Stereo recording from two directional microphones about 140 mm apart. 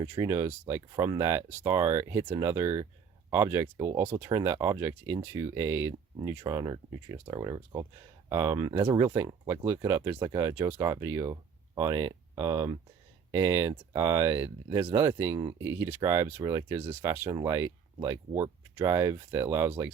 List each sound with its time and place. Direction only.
0.0 s speech: 25° right (ahead or behind)
6.4 s speech: 30° right (ahead or behind)